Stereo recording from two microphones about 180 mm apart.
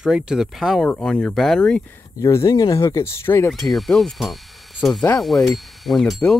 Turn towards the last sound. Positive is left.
turn(degrees=0)  # may be behind; listen again after turning